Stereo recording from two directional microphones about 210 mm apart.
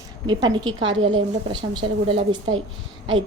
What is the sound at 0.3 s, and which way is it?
Speech, 20° right (ahead or behind).